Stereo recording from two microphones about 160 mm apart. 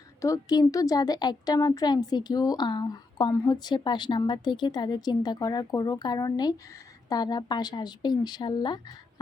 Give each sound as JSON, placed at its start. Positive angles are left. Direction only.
{"t": 0.2, "sound": "a woman's voice", "side_deg": 20}